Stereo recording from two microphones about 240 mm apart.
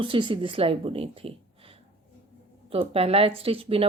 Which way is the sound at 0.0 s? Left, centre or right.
Right.